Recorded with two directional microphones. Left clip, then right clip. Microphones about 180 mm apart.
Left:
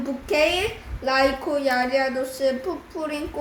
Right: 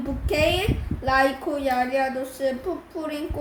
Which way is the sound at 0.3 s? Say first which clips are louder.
Left 1 dB; 5° right (ahead or behind).